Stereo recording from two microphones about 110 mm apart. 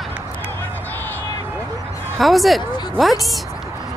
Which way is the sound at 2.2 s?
Centre (ahead or behind).